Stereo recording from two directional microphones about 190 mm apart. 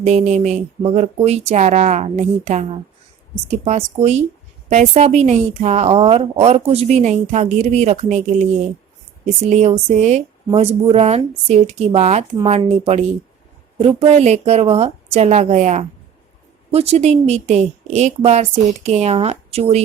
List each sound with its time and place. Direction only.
0.0 s a woman's voice: 35° right (ahead or behind)